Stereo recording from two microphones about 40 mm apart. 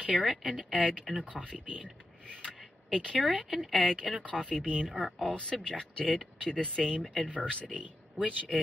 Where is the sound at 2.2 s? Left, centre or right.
Left.